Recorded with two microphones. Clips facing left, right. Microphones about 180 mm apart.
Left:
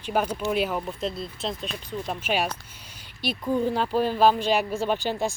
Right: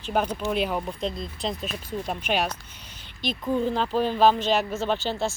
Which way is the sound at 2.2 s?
10° left (ahead or behind).